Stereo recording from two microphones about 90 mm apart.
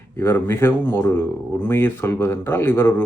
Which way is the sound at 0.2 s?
25° left (ahead or behind).